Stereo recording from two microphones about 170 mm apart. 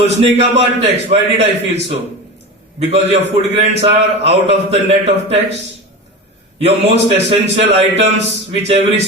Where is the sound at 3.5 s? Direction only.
35° right (ahead or behind).